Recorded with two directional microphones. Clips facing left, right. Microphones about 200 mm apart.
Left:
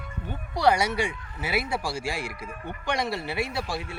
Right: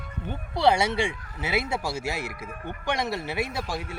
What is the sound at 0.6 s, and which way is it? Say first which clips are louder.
Speech: right 1 dB; 25° right (ahead or behind).